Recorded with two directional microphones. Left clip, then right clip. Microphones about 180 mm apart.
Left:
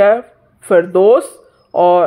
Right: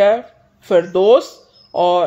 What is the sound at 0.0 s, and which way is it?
Speech, 30° left (ahead or behind).